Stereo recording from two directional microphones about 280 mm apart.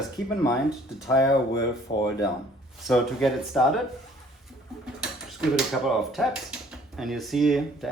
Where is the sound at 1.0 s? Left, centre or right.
Centre.